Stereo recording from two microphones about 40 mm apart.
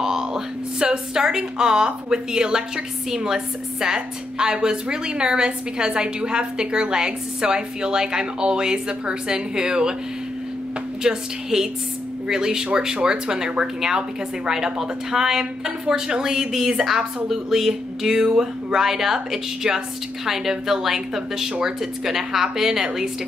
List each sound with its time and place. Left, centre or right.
0.0 s a woman's voice: centre
11.0 s a woman's voice: centre